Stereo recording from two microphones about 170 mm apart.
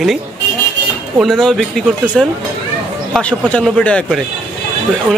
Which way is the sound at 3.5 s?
5° left (ahead or behind).